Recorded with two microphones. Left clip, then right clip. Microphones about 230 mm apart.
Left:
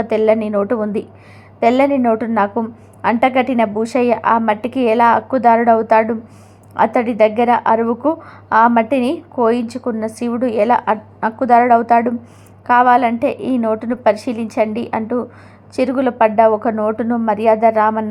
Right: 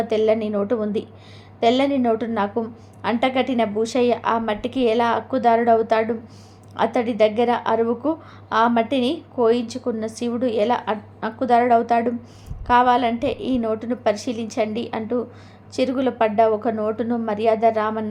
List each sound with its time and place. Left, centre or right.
0.5 s a woman's voice: centre